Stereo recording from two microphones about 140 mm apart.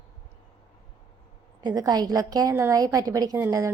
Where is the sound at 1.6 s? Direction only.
30° right (ahead or behind).